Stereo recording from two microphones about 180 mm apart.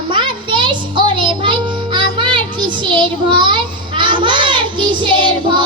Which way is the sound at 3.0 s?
25° right (ahead or behind).